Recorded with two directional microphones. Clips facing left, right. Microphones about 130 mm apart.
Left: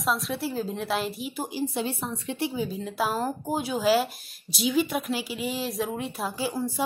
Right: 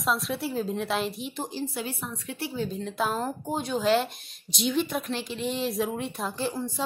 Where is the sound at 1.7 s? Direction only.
25° left (ahead or behind).